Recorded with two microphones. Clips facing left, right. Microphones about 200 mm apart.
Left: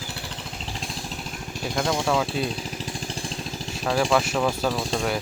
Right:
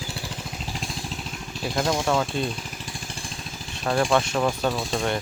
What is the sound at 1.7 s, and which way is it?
Speech, 5° right (ahead or behind).